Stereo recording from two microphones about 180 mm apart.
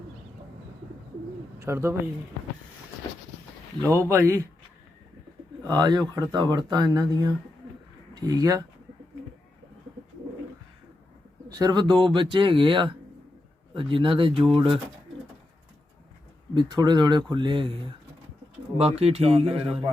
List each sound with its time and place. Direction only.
1.5 s speech: 15° right (ahead or behind)
3.8 s a man's voice: 15° right (ahead or behind)
5.6 s speech: 20° right (ahead or behind)
11.4 s speech: 20° right (ahead or behind)
16.6 s speech: 25° right (ahead or behind)
18.8 s a man's voice: 35° right (ahead or behind)